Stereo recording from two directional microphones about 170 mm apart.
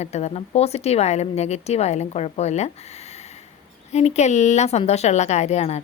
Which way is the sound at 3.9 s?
40° left (ahead or behind).